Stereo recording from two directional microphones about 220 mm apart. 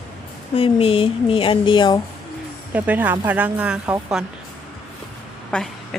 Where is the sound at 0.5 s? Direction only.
25° left (ahead or behind).